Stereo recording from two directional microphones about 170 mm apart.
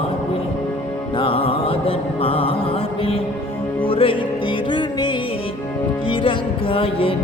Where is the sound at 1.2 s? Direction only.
30° left (ahead or behind).